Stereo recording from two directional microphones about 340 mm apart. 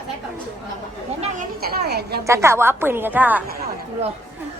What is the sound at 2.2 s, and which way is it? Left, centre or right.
A woman's voice, centre.